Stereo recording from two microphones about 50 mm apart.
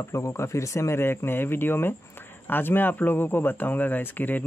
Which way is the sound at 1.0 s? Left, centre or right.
Left.